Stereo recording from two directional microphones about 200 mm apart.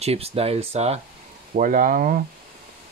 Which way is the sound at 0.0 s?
30° right (ahead or behind).